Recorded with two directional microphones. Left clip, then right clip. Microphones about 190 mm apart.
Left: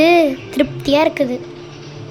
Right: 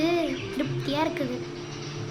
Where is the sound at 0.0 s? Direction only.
45° left (ahead or behind).